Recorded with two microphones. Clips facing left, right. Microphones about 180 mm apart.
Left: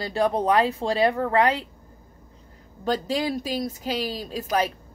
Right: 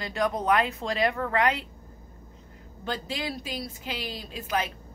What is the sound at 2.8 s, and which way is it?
A woman's voice, 40° left (ahead or behind).